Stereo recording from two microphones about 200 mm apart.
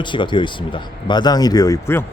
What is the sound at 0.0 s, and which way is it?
Speech, 25° left (ahead or behind).